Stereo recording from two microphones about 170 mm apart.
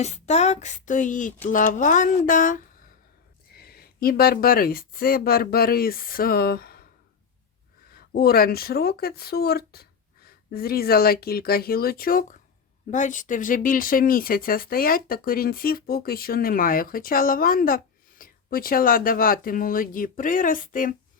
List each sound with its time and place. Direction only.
0.0 s a sound: 40° left (ahead or behind)
3.5 s speech: 65° left (ahead or behind)
7.9 s speech: 60° left (ahead or behind)